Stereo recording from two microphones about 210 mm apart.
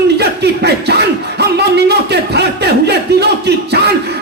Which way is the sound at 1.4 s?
50° right (ahead or behind).